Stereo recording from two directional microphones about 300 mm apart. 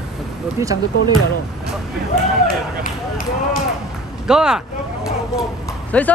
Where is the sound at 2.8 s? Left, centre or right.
Left.